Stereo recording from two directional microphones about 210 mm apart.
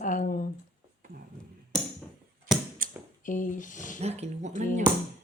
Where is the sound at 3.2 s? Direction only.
40° left (ahead or behind).